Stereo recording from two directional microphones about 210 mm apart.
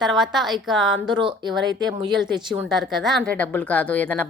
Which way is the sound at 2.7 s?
Centre (ahead or behind).